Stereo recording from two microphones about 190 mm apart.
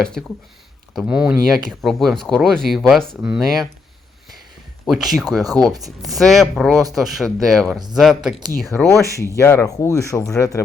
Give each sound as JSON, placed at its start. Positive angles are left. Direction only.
{"t": 0.9, "sound": "speech", "side_deg": -5}
{"t": 4.9, "sound": "speech", "side_deg": 0}
{"t": 8.7, "sound": "speech", "side_deg": 10}